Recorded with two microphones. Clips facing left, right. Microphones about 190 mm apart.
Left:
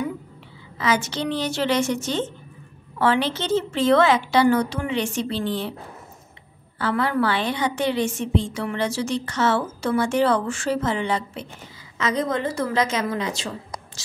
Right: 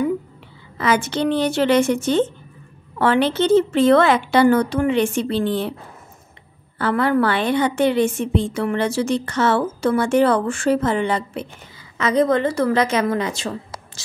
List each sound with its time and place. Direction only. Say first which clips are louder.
0.7 s a woman's voice: right 4 dB; 55° right (ahead or behind)
6.8 s a woman's voice: right 4 dB; 55° right (ahead or behind)